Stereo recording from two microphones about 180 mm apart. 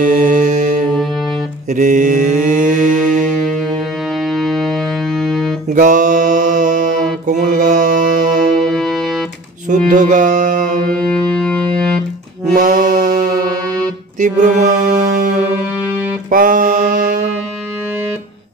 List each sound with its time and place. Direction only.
0.0 s mantra: 45° right (ahead or behind)
4.1 s music: centre (ahead or behind)
5.7 s music: 45° right (ahead or behind)
8.6 s music: centre (ahead or behind)
9.7 s music: 45° right (ahead or behind)
11.1 s music: 5° left (ahead or behind)
12.4 s music: 45° right (ahead or behind)
14.2 s music: 40° right (ahead or behind)
15.8 s music: 10° right (ahead or behind)
16.3 s mantra: 45° right (ahead or behind)